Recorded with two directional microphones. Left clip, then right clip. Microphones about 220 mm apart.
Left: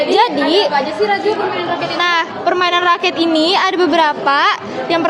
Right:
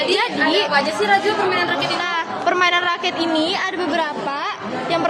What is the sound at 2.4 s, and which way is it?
A woman's voice, 15° left (ahead or behind).